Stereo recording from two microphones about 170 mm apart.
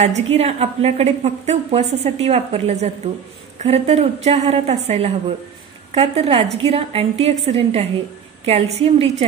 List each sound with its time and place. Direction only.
0.0 s a woman's voice: 40° right (ahead or behind)